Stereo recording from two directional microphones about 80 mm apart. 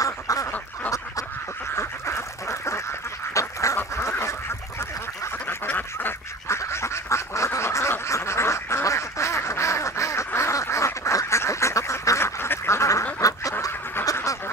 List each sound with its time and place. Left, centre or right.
0.0 s duck: left
4.2 s goose: left
5.7 s goose: left
6.6 s duck: left